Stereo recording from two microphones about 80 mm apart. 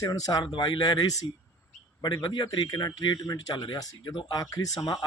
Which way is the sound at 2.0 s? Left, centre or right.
Left.